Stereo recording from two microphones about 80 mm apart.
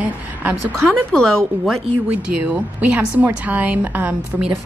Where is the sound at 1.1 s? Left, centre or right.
Centre.